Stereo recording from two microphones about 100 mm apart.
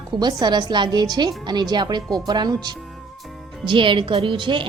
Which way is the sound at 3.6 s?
55° right (ahead or behind).